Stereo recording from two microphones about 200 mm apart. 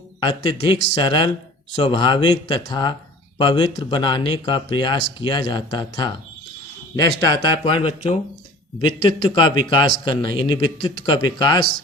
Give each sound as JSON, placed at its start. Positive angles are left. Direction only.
{"t": 0.2, "sound": "speech", "side_deg": 20}
{"t": 7.3, "sound": "speech", "side_deg": 20}